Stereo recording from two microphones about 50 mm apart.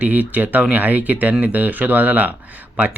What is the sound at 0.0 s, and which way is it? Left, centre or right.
Speech, right.